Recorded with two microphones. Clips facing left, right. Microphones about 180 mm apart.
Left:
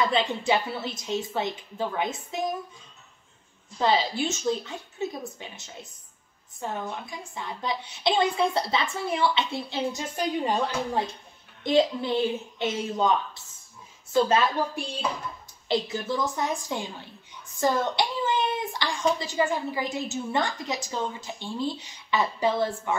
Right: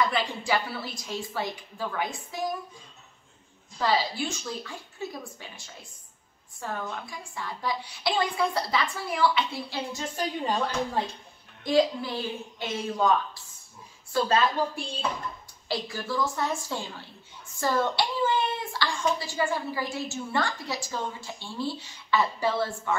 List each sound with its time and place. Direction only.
0.0 s speech: 25° left (ahead or behind)
3.7 s speech: 20° left (ahead or behind)
11.6 s speech: 25° left (ahead or behind)
15.7 s a woman's voice: 20° left (ahead or behind)